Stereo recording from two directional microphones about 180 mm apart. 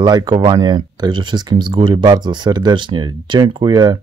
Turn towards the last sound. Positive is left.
turn(degrees=-25)  # may be behind; listen again after turning